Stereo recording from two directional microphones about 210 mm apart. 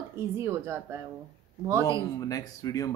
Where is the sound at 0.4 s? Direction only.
10° right (ahead or behind).